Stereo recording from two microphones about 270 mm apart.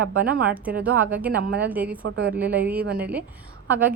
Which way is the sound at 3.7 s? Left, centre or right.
Centre.